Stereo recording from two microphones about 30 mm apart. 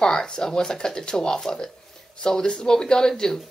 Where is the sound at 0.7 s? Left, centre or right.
Left.